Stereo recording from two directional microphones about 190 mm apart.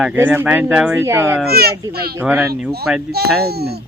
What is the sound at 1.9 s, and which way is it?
Speech, 55° right (ahead or behind).